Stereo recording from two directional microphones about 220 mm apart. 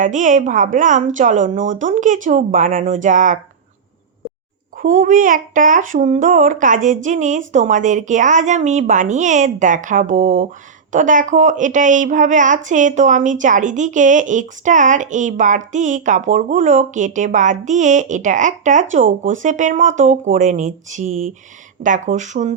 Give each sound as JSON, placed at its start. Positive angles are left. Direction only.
{"t": 0.0, "sound": "a woman's voice", "side_deg": -35}
{"t": 4.8, "sound": "a woman's voice", "side_deg": -40}